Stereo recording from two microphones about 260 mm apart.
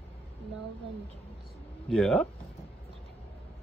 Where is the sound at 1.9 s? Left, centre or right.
Centre.